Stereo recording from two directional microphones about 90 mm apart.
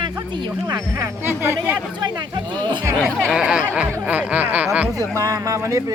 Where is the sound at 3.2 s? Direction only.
5° right (ahead or behind).